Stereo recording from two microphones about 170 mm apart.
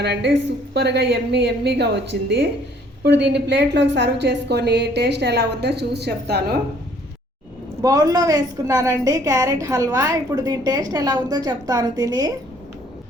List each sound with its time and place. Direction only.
0.0 s a woman's voice: 80° right
7.8 s a woman's voice: 20° right (ahead or behind)